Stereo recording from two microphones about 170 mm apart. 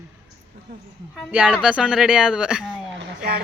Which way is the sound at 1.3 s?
5° right (ahead or behind).